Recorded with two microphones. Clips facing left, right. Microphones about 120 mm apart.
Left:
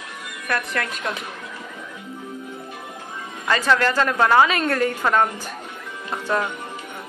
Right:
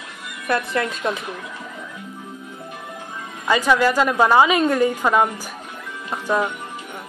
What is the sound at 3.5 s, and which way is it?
A woman's voice, 10° right (ahead or behind).